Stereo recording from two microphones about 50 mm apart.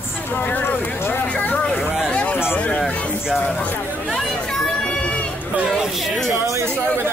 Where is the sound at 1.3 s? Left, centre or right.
Left.